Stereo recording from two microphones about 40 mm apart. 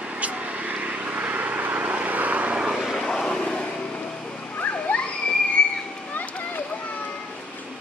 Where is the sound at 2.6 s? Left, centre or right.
Centre.